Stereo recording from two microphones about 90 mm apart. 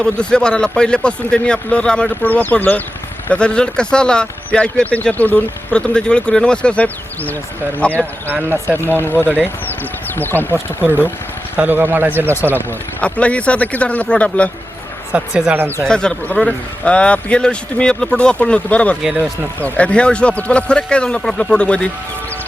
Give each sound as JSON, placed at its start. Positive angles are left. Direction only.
{"t": 0.0, "sound": "a man's voice", "side_deg": 10}
{"t": 7.9, "sound": "speech", "side_deg": -25}
{"t": 10.2, "sound": "speech", "side_deg": 20}
{"t": 10.8, "sound": "speech", "side_deg": -20}
{"t": 12.5, "sound": "a man's voice", "side_deg": 20}
{"t": 15.1, "sound": "speech", "side_deg": -10}
{"t": 15.5, "sound": "speech", "side_deg": -25}
{"t": 15.9, "sound": "a man's voice", "side_deg": 10}